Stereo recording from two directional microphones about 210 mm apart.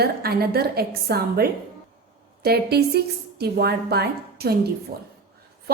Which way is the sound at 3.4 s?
50° right (ahead or behind).